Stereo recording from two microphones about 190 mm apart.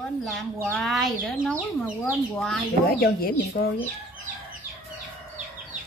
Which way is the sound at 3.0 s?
50° left (ahead or behind).